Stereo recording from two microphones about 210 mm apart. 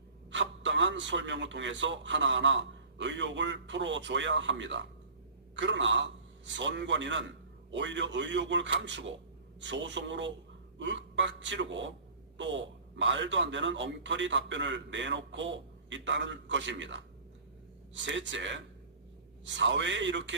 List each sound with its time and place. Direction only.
0.3 s a man's voice: 60° right (ahead or behind)